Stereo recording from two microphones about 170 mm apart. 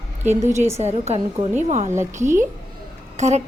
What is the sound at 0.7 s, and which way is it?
A woman's voice, 40° right (ahead or behind).